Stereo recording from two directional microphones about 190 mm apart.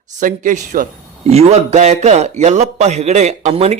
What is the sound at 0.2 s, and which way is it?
A man's voice, 40° right (ahead or behind).